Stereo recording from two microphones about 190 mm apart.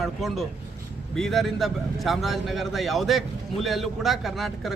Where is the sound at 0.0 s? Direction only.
Centre (ahead or behind).